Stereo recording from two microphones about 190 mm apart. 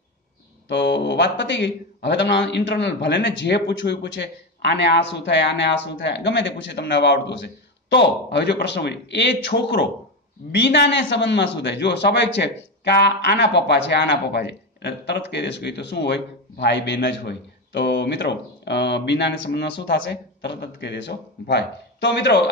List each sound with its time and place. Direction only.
0.7 s a man's voice: 65° left (ahead or behind)